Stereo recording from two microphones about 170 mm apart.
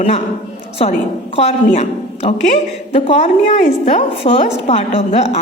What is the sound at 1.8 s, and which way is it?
A woman's voice, 40° left (ahead or behind).